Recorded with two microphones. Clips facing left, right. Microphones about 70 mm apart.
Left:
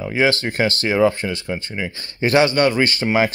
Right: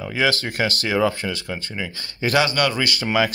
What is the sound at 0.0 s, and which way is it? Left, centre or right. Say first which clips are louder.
Speech: left 3 dB; left.